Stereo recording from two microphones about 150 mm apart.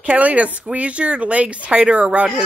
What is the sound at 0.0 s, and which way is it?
Speech, 10° right (ahead or behind).